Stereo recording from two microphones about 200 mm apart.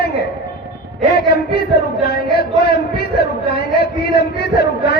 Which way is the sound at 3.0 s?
50° left (ahead or behind).